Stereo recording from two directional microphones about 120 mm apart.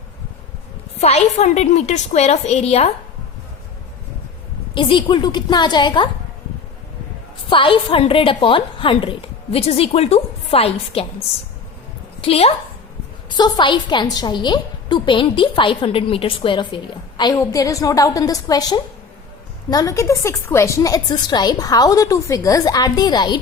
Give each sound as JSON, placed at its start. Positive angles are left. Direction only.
{"t": 0.9, "sound": "a woman's voice", "side_deg": 65}
{"t": 4.7, "sound": "a woman's voice", "side_deg": 45}
{"t": 7.5, "sound": "a woman's voice", "side_deg": 45}
{"t": 12.2, "sound": "a woman's voice", "side_deg": 55}
{"t": 13.3, "sound": "a woman's voice", "side_deg": 40}
{"t": 17.3, "sound": "a woman's voice", "side_deg": 30}